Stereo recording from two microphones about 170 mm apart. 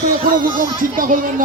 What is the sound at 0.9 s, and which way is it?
Speech, 55° right (ahead or behind).